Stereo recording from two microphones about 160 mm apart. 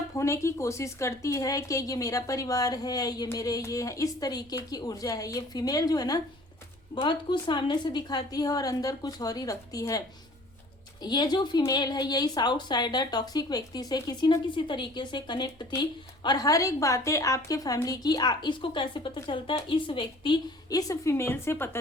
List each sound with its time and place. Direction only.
0.1 s a woman's voice: 15° left (ahead or behind)
11.0 s a woman's voice: 25° left (ahead or behind)